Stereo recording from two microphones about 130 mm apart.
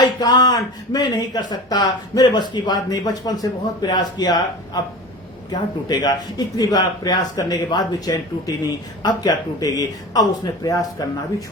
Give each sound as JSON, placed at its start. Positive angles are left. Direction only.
{"t": 0.0, "sound": "a man's voice", "side_deg": 30}